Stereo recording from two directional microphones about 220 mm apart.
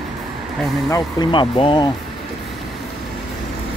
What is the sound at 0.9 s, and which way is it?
Speech, 20° left (ahead or behind).